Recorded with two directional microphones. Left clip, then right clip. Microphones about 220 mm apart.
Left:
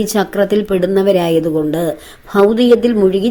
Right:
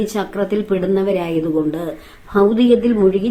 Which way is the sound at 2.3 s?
30° left (ahead or behind).